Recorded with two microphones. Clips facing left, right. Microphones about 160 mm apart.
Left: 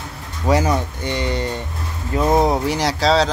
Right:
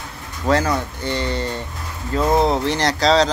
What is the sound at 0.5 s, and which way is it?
Speech, 15° left (ahead or behind).